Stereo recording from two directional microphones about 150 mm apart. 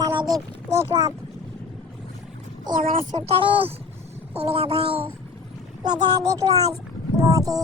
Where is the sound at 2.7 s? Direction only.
65° right (ahead or behind).